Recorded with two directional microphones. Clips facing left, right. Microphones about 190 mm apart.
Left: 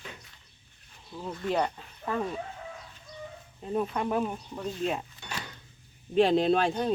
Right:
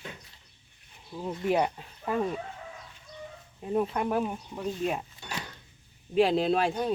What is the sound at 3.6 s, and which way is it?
Speech, 10° right (ahead or behind).